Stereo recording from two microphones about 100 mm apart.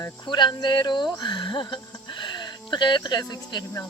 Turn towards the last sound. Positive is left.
turn(degrees=45)  # may be behind; listen again after turning